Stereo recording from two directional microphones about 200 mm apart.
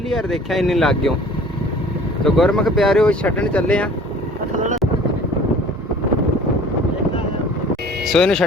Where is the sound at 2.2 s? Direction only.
Centre (ahead or behind).